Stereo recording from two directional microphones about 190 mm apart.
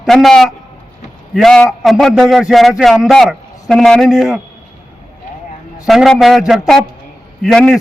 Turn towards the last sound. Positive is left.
turn(degrees=5)  # may be behind; listen again after turning